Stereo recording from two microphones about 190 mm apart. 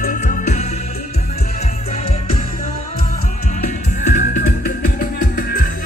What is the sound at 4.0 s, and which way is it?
Music, 40° left (ahead or behind).